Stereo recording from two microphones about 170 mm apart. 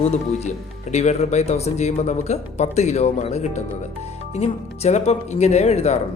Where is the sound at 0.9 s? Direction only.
40° left (ahead or behind).